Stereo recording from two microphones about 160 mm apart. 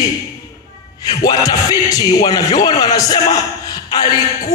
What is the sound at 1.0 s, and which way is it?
A man's voice, 25° left (ahead or behind).